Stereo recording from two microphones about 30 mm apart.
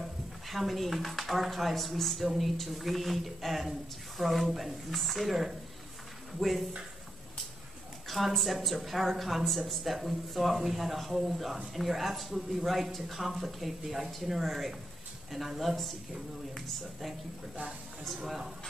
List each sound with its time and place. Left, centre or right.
0.5 s speech: centre
8.3 s speech: centre
18.0 s speech: centre